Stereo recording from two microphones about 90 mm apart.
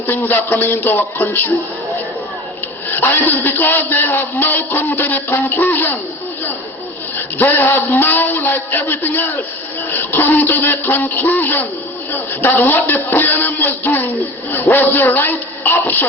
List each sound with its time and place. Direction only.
0.3 s music: 20° left (ahead or behind)
2.9 s music: 20° left (ahead or behind)
7.4 s music: 20° left (ahead or behind)